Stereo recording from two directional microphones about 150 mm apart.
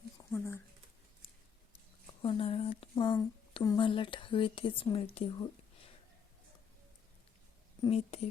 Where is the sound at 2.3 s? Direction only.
40° left (ahead or behind).